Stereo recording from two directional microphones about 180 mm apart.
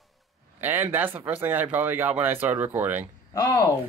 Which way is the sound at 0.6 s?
10° right (ahead or behind).